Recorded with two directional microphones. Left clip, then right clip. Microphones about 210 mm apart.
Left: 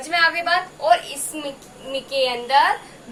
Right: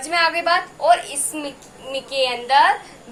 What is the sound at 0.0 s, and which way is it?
A woman's voice, 25° right (ahead or behind).